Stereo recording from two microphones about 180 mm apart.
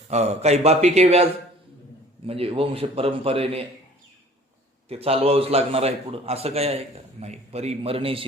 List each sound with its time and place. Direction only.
0.1 s a man's voice: 35° right (ahead or behind)
4.9 s a man's voice: 35° right (ahead or behind)